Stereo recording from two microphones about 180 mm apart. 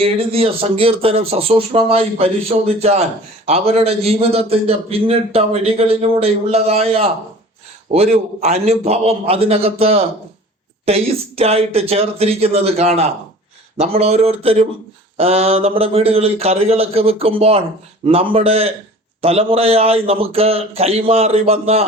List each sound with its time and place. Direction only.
0.0 s a man's voice: 30° right (ahead or behind)